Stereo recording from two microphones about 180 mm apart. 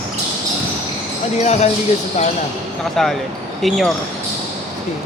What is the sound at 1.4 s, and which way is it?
Speech, 35° left (ahead or behind).